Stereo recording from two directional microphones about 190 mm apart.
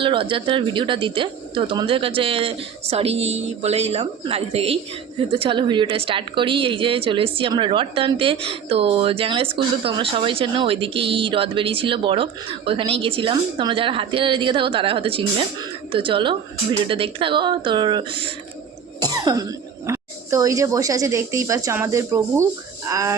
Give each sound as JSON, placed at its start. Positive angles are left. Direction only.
{"t": 0.0, "sound": "speech", "side_deg": -25}